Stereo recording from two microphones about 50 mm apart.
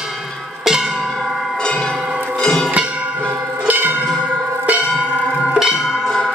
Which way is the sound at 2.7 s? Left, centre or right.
Right.